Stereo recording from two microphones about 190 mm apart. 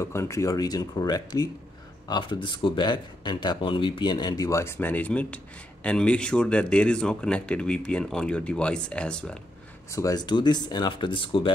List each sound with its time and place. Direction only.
0.0 s speech: 15° left (ahead or behind)
9.8 s speech: 15° left (ahead or behind)